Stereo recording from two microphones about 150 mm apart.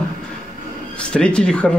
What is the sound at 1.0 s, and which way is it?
Speech, 5° left (ahead or behind).